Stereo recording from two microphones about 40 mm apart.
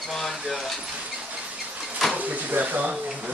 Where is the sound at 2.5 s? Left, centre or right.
Right.